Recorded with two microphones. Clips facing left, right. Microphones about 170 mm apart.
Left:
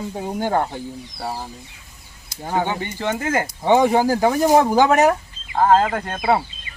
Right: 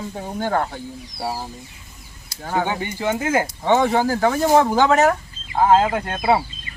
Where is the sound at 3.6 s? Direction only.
15° left (ahead or behind).